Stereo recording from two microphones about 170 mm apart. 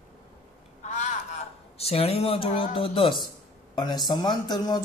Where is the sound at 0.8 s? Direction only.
45° left (ahead or behind); by 3.3 s 30° left (ahead or behind).